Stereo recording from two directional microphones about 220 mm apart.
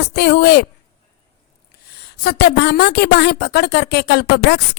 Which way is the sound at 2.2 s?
50° left (ahead or behind).